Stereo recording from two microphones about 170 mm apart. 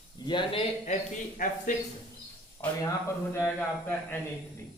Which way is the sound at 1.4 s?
55° left (ahead or behind).